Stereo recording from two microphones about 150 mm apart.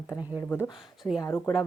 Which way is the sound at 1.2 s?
20° left (ahead or behind).